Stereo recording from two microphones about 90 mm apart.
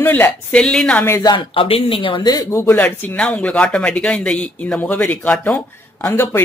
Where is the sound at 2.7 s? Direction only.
15° left (ahead or behind).